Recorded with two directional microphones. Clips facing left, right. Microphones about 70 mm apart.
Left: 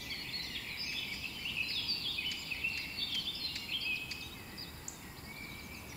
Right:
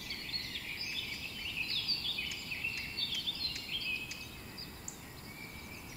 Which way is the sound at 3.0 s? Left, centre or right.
Right.